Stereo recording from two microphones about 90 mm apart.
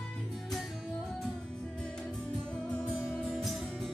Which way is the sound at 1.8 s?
10° left (ahead or behind).